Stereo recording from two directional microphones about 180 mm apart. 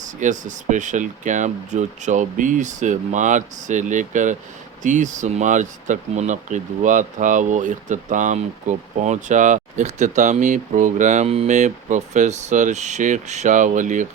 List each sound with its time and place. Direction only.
0.2 s speech: 45° right (ahead or behind)